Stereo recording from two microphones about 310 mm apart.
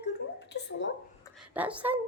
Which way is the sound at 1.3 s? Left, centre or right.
Centre.